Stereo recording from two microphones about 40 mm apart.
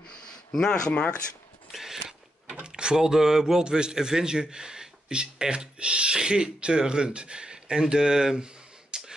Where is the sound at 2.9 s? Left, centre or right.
Centre.